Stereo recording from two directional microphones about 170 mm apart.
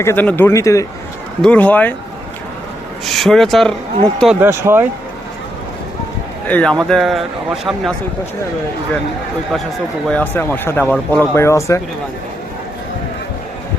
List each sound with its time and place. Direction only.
0.0 s speech: 15° left (ahead or behind)
1.4 s speech: 5° left (ahead or behind)
3.1 s a man's voice: centre (ahead or behind)
4.4 s speech: 15° right (ahead or behind)
6.5 s a man's voice: 5° left (ahead or behind)
10.1 s speech: 10° left (ahead or behind)